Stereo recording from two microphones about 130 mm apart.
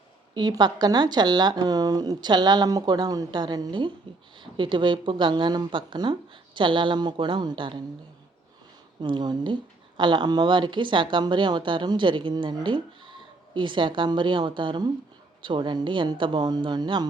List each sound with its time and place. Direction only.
0.3 s speech: 35° right (ahead or behind)
9.0 s speech: 35° right (ahead or behind)